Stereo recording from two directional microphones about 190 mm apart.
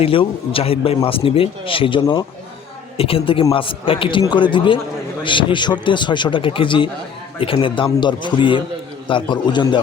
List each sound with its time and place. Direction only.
0.0 s speech: 30° left (ahead or behind)